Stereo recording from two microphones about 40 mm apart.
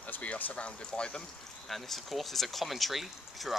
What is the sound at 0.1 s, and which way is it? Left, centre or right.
Speech, left.